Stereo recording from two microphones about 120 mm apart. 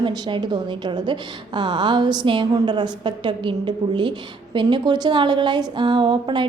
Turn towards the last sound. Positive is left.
turn(degrees=-40)  # may be behind; listen again after turning